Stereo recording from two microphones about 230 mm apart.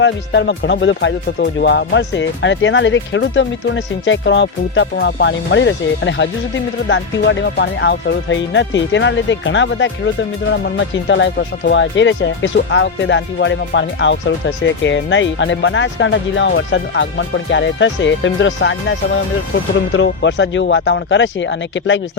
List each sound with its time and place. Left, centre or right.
0.0 s speech: left